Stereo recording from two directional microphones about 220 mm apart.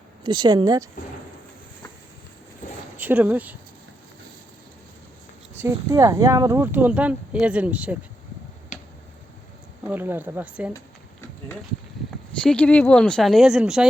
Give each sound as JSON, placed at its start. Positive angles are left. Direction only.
{"t": 0.3, "sound": "speech", "side_deg": -20}
{"t": 3.0, "sound": "speech", "side_deg": -10}
{"t": 5.5, "sound": "speech", "side_deg": -15}
{"t": 9.8, "sound": "speech", "side_deg": -10}
{"t": 12.4, "sound": "speech", "side_deg": 5}